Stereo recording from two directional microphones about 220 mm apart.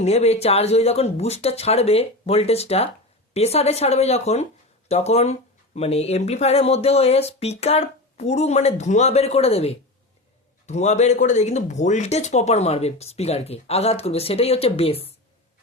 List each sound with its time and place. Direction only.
0.0 s speech: 30° left (ahead or behind)